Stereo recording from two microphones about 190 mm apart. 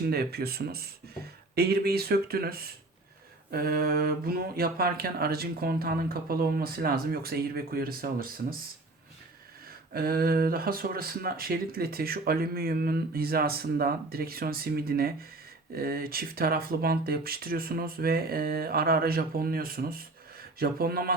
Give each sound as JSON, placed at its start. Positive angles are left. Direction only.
{"t": 0.0, "sound": "speech", "side_deg": -55}
{"t": 9.9, "sound": "speech", "side_deg": -50}